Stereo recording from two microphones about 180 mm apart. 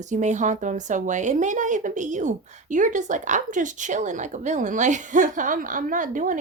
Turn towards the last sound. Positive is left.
turn(degrees=-45)  # may be behind; listen again after turning